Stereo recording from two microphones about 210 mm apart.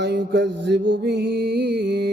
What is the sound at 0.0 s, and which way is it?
Music, 50° right (ahead or behind).